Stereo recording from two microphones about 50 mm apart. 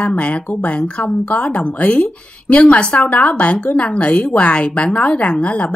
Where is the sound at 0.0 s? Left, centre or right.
Left.